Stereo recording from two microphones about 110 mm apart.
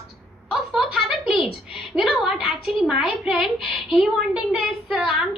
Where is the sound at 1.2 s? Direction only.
50° left (ahead or behind).